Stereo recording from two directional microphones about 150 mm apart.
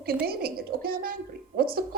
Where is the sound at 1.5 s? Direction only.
90° right.